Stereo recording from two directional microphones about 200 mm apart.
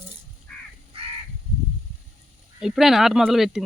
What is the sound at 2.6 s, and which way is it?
Speech, centre (ahead or behind).